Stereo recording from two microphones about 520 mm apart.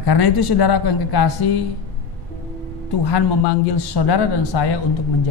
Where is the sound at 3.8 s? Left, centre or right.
Left.